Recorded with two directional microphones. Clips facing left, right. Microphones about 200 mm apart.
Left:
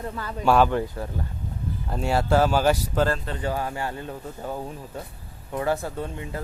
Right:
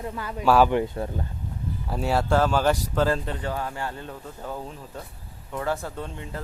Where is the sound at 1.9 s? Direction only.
5° right (ahead or behind).